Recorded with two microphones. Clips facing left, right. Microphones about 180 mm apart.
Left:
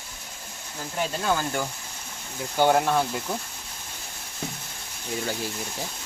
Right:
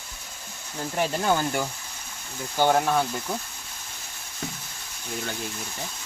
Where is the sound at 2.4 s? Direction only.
5° left (ahead or behind).